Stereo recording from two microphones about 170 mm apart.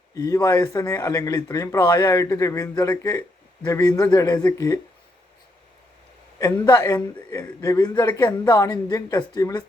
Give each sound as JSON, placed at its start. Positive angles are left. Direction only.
{"t": 0.1, "sound": "speech", "side_deg": 20}
{"t": 6.4, "sound": "speech", "side_deg": 20}